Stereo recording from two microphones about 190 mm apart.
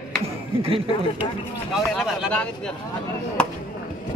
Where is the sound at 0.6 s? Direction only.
30° right (ahead or behind).